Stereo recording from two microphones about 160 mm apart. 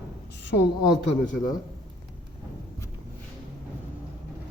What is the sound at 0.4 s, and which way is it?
Speech, 90° left.